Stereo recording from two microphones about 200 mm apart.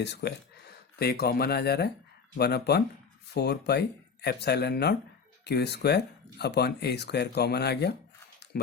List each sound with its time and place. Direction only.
0.0 s speech: 55° left (ahead or behind)